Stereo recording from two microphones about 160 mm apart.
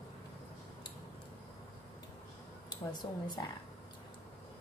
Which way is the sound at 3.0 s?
25° left (ahead or behind).